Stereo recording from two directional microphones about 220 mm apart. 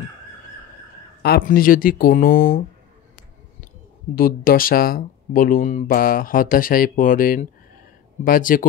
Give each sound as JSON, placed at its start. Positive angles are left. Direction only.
{"t": 1.2, "sound": "speech", "side_deg": 40}
{"t": 4.1, "sound": "speech", "side_deg": 40}